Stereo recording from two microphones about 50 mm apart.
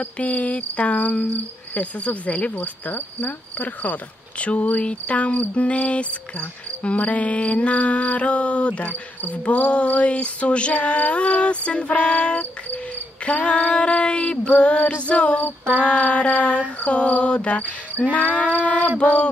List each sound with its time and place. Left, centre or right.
0.0 s cricket: left